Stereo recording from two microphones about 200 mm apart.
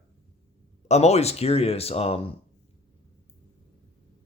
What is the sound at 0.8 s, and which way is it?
Speech, 35° left (ahead or behind).